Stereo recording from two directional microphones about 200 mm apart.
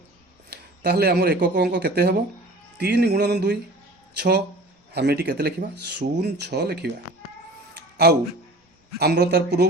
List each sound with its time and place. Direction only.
0.5 s speech: 55° right (ahead or behind)
8.0 s speech: 55° right (ahead or behind)